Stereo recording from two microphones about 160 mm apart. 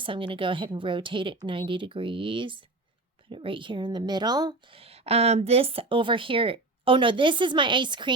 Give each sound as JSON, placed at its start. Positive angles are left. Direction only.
{"t": 0.0, "sound": "a woman's voice", "side_deg": -30}
{"t": 4.8, "sound": "speech", "side_deg": -40}